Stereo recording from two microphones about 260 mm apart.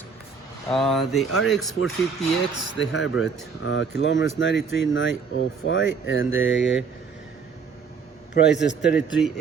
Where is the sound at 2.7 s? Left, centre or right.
Left.